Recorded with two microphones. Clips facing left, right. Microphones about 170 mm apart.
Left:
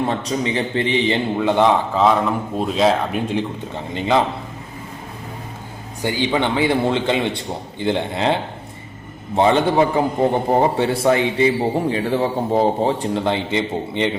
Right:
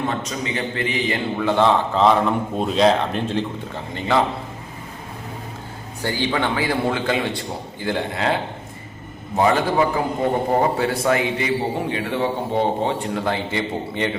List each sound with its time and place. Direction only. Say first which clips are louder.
0.1 s a man's voice: left 4 dB; 30° left (ahead or behind)
2.0 s a man's voice: even; centre (ahead or behind); by 4.2 s 20° left (ahead or behind)
6.0 s a man's voice: left 3 dB; 15° left (ahead or behind)